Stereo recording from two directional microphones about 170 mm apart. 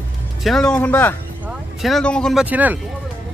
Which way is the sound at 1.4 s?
Centre (ahead or behind).